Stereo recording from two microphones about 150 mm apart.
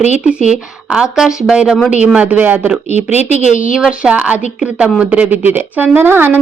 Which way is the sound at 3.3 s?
55° left (ahead or behind).